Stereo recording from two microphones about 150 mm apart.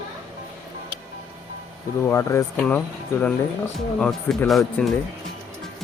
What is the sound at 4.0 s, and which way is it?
Speech, 5° left (ahead or behind).